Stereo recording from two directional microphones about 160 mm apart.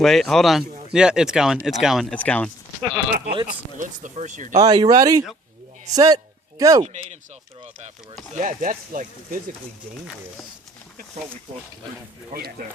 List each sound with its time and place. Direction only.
0.0 s speech: centre (ahead or behind)
3.8 s speech: 55° right (ahead or behind)
4.6 s speech: 25° right (ahead or behind)
6.8 s speech: 45° right (ahead or behind)
8.4 s speech: 55° right (ahead or behind)
12.3 s speech: 70° right (ahead or behind)